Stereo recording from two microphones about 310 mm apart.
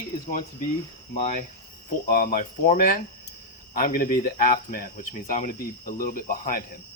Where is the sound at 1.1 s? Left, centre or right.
Left.